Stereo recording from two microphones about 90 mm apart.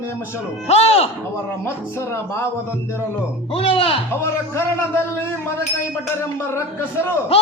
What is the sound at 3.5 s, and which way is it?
Speech, 90° left.